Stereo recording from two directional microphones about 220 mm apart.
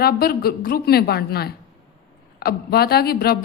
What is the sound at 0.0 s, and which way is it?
A woman's voice, 45° left (ahead or behind).